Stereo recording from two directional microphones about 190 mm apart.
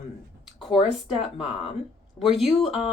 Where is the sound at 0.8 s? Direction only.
30° left (ahead or behind).